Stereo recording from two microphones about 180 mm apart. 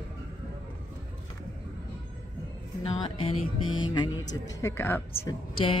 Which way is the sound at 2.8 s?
30° left (ahead or behind).